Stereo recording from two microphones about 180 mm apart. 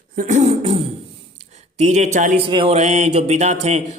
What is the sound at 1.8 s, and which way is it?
Speech, 40° right (ahead or behind).